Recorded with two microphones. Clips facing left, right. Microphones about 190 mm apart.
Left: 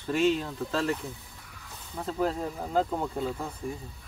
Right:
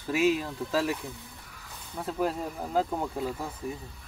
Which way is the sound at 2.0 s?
5° right (ahead or behind).